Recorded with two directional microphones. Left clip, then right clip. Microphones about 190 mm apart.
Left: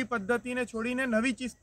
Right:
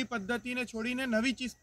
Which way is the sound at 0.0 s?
20° left (ahead or behind).